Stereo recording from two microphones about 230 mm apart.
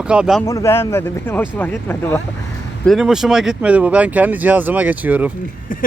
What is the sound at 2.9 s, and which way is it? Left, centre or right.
Speech, centre.